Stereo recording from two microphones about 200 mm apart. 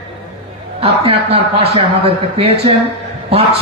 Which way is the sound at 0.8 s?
30° right (ahead or behind).